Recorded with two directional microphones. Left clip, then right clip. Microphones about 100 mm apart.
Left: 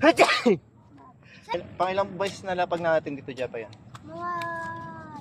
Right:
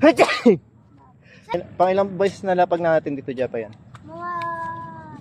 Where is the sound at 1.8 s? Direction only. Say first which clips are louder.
Right 8 dB; 50° right (ahead or behind).